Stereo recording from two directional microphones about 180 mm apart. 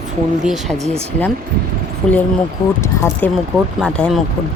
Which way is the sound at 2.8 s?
15° left (ahead or behind).